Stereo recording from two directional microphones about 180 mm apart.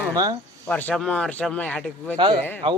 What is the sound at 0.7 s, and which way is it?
Speech, 10° left (ahead or behind).